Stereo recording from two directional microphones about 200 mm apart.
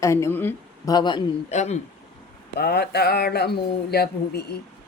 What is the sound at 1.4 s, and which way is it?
Speech, 35° left (ahead or behind).